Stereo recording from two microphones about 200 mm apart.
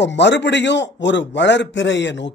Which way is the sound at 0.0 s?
60° left (ahead or behind).